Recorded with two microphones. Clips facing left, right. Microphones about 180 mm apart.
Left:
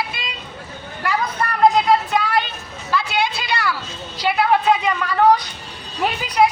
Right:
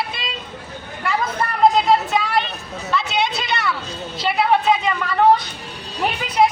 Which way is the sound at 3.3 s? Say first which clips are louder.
Right 1 dB; 20° right (ahead or behind).